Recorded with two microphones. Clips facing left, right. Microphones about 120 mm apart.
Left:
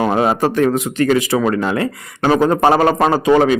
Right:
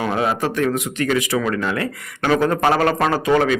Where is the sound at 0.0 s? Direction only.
40° left (ahead or behind).